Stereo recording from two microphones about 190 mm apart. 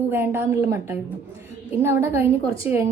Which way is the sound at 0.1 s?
10° right (ahead or behind).